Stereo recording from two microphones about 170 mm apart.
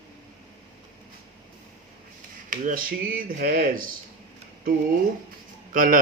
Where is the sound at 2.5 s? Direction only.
50° right (ahead or behind).